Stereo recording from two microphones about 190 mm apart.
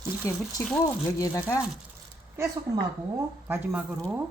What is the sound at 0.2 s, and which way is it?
Speech, 15° left (ahead or behind).